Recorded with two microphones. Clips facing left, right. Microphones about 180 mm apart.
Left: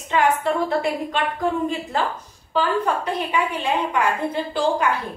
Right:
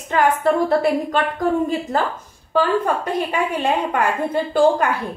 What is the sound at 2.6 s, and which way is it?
A woman's voice, 50° right (ahead or behind).